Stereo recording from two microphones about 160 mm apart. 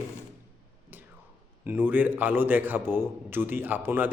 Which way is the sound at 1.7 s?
10° right (ahead or behind).